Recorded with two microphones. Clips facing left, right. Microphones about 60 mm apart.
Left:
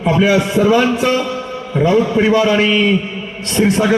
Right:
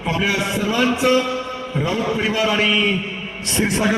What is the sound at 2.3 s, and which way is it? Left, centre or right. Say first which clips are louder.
Speech: left 7 dB; left.